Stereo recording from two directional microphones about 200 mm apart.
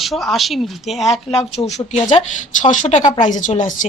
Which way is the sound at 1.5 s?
35° left (ahead or behind).